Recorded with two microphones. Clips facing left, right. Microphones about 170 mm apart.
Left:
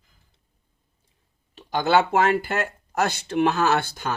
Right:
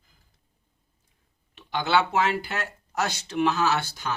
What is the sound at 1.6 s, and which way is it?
Speech, 45° left (ahead or behind).